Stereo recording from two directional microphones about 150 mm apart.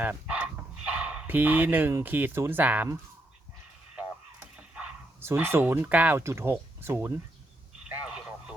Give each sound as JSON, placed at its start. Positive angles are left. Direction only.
{"t": 0.0, "sound": "speech", "side_deg": -10}
{"t": 5.2, "sound": "speech", "side_deg": -15}
{"t": 7.9, "sound": "radio", "side_deg": -5}